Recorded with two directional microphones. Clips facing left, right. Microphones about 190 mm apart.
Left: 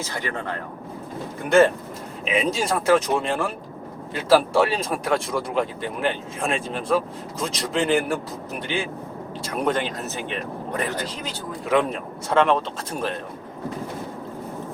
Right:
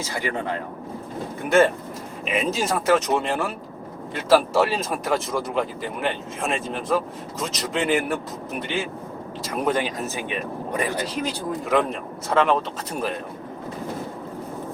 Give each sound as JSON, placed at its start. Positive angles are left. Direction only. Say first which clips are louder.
{"t": 0.1, "sound": "speech", "louder": "right 2 dB", "side_deg": -10}
{"t": 1.5, "sound": "speech", "louder": "left 1 dB", "side_deg": 0}
{"t": 11.7, "sound": "speech", "louder": "left 2 dB", "side_deg": 0}